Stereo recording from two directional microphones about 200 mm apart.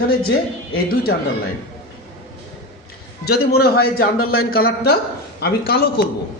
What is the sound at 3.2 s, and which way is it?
A man's voice, 50° left (ahead or behind).